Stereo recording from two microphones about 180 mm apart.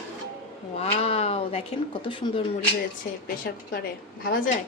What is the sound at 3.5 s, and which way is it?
Speech, 60° left (ahead or behind).